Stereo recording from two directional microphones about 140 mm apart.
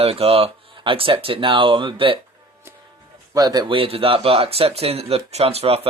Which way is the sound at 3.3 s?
30° right (ahead or behind).